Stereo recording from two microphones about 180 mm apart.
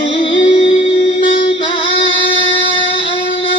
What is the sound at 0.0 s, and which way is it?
Music, 30° left (ahead or behind).